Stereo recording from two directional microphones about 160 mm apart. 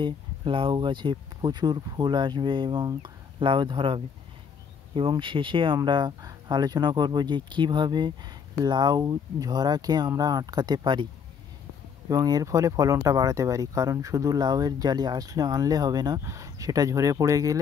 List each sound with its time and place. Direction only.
0.0 s speech: 30° right (ahead or behind)
12.1 s speech: 25° right (ahead or behind)